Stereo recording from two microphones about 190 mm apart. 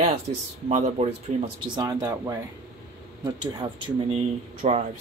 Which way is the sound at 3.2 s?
20° right (ahead or behind).